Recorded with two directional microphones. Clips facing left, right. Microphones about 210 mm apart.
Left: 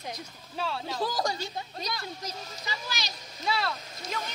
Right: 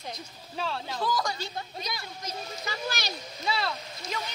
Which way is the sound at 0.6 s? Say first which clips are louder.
Even; centre (ahead or behind).